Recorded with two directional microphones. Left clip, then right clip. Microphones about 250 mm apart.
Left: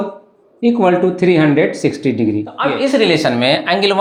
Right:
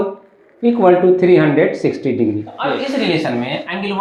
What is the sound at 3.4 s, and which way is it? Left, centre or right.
Speech, left.